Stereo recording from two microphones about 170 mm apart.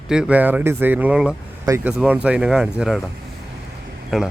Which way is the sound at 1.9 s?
5° right (ahead or behind).